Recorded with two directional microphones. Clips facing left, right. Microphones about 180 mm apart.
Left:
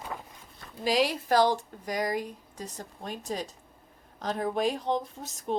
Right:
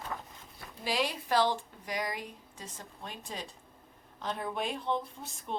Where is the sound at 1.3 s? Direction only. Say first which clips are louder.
Left 4 dB; 40° left (ahead or behind).